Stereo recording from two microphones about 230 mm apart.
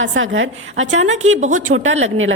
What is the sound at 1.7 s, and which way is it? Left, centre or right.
Speech, right.